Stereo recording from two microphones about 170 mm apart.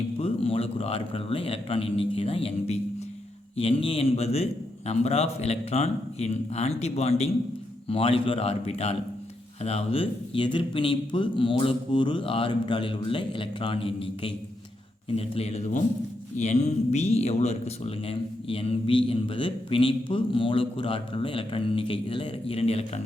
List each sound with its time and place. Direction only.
0.2 s speech: 35° left (ahead or behind)